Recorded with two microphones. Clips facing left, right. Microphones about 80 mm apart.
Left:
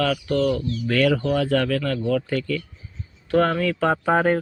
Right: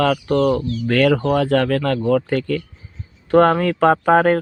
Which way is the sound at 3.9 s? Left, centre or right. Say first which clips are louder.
Right 6 dB; right.